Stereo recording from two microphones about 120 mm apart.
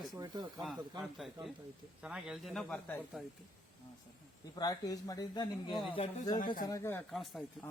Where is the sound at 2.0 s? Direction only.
5° right (ahead or behind).